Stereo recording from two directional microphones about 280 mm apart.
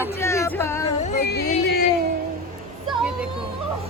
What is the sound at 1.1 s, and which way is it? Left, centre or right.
Speech, left.